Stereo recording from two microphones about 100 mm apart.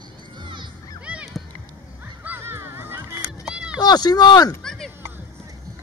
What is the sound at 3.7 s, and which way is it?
Speech, 45° left (ahead or behind).